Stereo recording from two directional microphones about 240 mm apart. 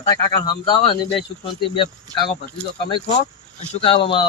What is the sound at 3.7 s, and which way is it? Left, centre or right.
Speech, left.